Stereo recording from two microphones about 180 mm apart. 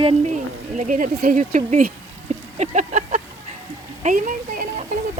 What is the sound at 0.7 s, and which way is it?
Speech, 45° right (ahead or behind).